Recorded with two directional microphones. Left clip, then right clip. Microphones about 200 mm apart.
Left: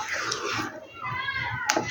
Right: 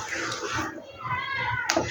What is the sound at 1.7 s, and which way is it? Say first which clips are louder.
Tap: left 1 dB; 20° left (ahead or behind).